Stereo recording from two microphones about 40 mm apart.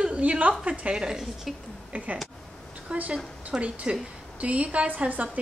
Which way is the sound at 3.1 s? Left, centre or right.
Right.